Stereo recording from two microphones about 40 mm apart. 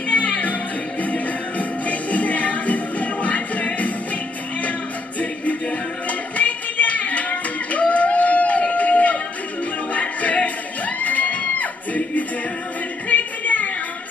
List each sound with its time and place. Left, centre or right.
0.1 s music: left
5.2 s music: left
7.9 s a sound: left
9.9 s a capella: left
11.0 s music: left